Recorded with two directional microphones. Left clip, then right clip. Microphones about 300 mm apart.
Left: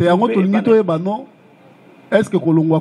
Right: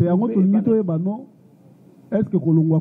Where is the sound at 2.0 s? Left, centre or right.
Centre.